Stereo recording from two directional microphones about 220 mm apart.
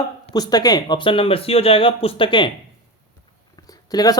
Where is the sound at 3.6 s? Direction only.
15° left (ahead or behind).